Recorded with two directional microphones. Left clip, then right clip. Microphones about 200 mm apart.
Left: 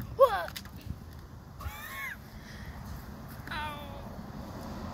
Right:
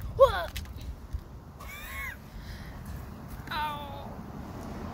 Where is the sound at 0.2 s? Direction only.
5° right (ahead or behind).